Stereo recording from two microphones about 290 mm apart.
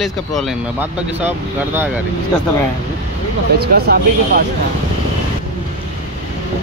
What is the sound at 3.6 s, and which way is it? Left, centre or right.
Speech, right.